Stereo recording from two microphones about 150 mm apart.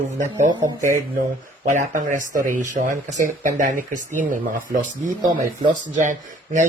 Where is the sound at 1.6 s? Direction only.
55° right (ahead or behind).